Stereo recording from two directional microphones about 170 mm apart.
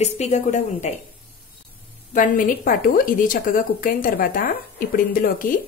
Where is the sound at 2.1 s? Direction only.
50° left (ahead or behind).